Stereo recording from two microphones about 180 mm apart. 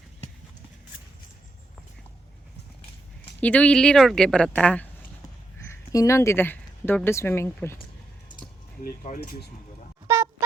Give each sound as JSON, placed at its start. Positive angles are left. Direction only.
{"t": 3.4, "sound": "a woman's voice", "side_deg": 10}
{"t": 8.8, "sound": "speech", "side_deg": 55}